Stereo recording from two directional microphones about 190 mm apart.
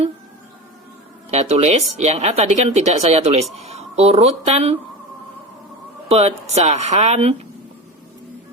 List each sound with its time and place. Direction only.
1.3 s speech: 35° right (ahead or behind)
6.1 s speech: 35° right (ahead or behind)